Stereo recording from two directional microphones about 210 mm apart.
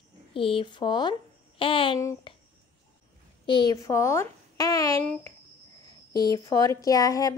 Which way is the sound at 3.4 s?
20° left (ahead or behind).